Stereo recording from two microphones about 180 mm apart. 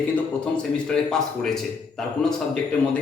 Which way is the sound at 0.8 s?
5° left (ahead or behind).